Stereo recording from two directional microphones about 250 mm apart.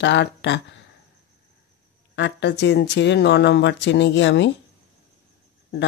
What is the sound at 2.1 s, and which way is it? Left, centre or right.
Speech, left.